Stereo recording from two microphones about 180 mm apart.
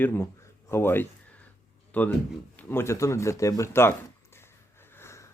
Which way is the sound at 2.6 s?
10° left (ahead or behind).